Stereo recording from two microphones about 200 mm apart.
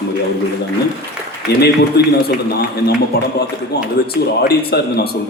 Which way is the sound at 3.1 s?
50° left (ahead or behind).